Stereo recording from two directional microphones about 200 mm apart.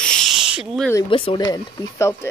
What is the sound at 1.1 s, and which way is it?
Speech, 25° left (ahead or behind).